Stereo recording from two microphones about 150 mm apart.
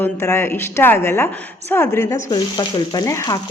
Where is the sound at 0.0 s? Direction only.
15° left (ahead or behind).